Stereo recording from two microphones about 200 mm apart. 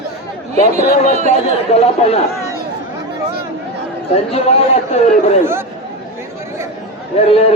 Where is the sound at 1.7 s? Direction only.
35° left (ahead or behind).